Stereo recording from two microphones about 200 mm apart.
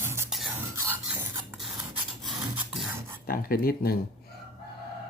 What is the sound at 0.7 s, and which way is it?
Filing, 10° right (ahead or behind).